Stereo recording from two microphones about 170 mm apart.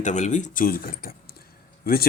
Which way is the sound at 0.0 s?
45° left (ahead or behind).